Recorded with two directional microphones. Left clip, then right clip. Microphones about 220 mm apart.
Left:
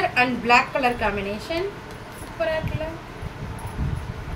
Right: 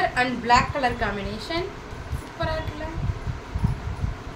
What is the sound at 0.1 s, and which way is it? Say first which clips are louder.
Speech: left 2 dB; 5° right (ahead or behind).